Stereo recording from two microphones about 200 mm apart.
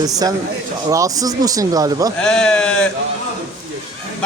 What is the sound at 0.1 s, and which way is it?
Speech, 20° right (ahead or behind).